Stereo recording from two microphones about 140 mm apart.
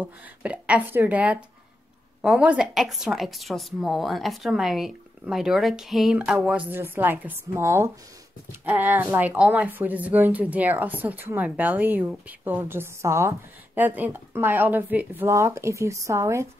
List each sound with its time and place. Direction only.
0.0 s a woman's voice: 10° right (ahead or behind)